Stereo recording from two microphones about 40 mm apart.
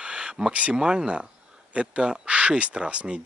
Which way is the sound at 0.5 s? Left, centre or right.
Right.